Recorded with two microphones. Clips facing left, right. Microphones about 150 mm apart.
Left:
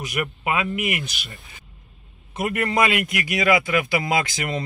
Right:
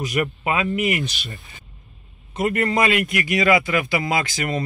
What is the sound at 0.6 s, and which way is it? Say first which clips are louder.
Speech: right 6 dB; 5° left (ahead or behind).